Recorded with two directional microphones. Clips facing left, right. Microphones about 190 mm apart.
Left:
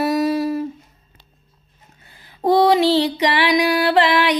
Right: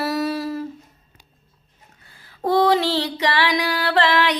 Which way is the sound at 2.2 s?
15° left (ahead or behind).